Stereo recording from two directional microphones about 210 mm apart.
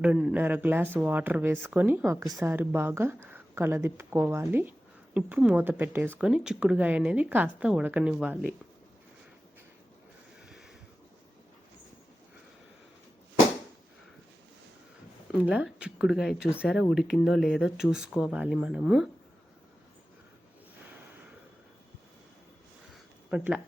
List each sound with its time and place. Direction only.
0.0 s speech: 5° right (ahead or behind)
10.4 s a sound: centre (ahead or behind)
15.4 s speech: 5° right (ahead or behind)
23.3 s speech: 5° right (ahead or behind)